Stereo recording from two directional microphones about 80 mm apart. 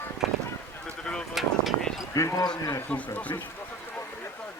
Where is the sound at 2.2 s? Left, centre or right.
Left.